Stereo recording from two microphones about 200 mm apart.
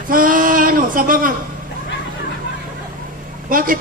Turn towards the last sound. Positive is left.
turn(degrees=-45)  # may be behind; listen again after turning